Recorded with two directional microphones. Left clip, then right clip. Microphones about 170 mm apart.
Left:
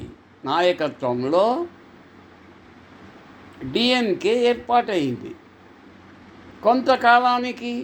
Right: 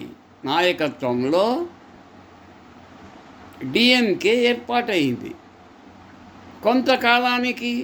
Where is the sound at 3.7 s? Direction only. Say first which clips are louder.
Right 3 dB; 5° right (ahead or behind).